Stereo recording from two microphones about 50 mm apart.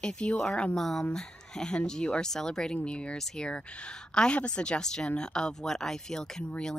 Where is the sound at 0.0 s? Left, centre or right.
Centre.